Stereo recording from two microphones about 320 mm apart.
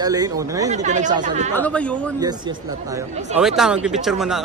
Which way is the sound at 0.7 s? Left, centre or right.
Right.